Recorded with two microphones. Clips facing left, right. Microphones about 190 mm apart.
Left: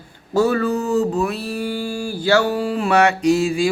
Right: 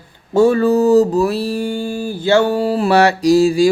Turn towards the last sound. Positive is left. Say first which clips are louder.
# right 5 dB
turn(degrees=-35)  # may be behind; listen again after turning